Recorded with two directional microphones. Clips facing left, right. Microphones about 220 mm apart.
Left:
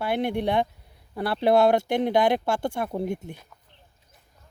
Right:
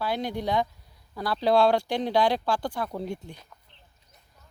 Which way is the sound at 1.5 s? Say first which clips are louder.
Left 2 dB; 20° left (ahead or behind).